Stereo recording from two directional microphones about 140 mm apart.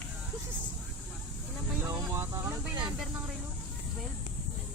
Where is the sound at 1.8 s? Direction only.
20° right (ahead or behind).